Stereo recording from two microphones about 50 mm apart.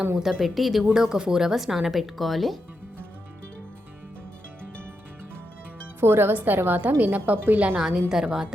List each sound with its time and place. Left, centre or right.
0.2 s speech: centre
0.9 s speech: centre
6.0 s speech: right
6.3 s a woman's voice: right
7.8 s speech: centre